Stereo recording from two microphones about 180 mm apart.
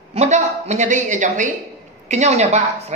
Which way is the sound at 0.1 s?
40° right (ahead or behind).